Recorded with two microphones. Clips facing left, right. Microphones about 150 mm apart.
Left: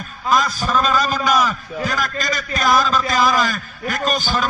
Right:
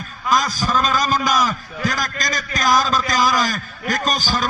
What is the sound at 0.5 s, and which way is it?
A man's voice, 40° right (ahead or behind).